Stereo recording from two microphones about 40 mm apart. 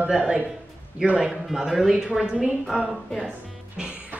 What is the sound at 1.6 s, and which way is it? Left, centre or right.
Speech, centre.